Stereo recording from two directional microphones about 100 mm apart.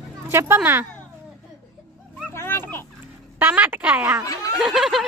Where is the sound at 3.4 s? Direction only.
20° right (ahead or behind).